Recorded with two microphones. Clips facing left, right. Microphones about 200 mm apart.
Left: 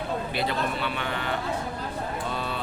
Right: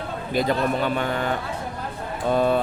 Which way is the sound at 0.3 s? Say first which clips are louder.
Right 10 dB; 45° right (ahead or behind).